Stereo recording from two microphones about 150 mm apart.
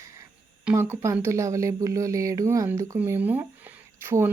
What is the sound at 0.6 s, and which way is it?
Speech, 15° right (ahead or behind).